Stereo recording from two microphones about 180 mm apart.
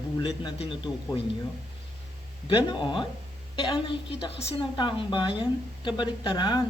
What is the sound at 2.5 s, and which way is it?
A woman's voice, 25° left (ahead or behind).